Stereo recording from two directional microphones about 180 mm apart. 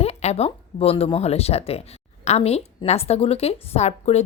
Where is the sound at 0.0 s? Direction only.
35° left (ahead or behind).